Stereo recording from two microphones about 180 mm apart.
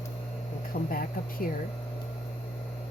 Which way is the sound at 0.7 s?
50° left (ahead or behind).